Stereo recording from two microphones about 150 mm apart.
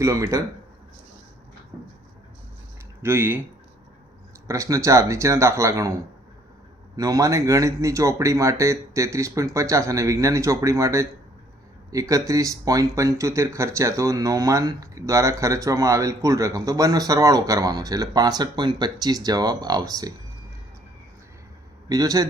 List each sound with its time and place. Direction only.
0.0 s speech: 20° right (ahead or behind)
3.0 s speech: 15° right (ahead or behind)
4.4 s speech: 20° right (ahead or behind)
21.8 s speech: 25° right (ahead or behind)